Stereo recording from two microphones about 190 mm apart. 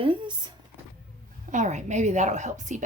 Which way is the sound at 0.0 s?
25° right (ahead or behind).